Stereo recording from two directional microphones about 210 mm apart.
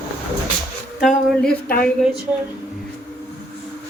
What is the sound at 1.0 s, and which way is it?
Speech, 5° left (ahead or behind).